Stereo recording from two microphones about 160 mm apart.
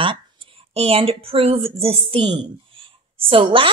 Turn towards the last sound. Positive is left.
turn(degrees=-35)  # may be behind; listen again after turning